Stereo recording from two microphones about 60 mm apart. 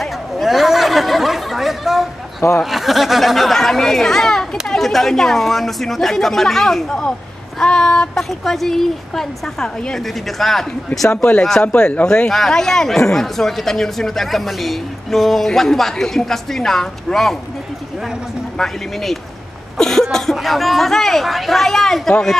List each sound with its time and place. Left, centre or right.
0.0 s a sound: centre
2.6 s speech: centre
11.1 s speech: centre
12.3 s speech: centre
18.6 s speech: centre